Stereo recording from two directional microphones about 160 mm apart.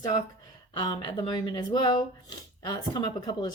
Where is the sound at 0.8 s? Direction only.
30° left (ahead or behind).